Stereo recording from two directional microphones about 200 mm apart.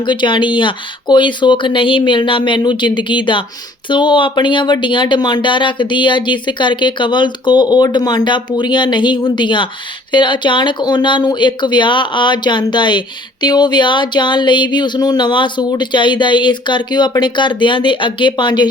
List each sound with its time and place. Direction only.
0.0 s speech: 25° left (ahead or behind)